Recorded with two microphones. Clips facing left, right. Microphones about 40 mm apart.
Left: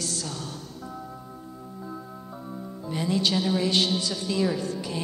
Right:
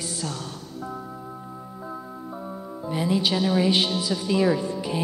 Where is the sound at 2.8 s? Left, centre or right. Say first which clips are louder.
Right 2 dB; centre.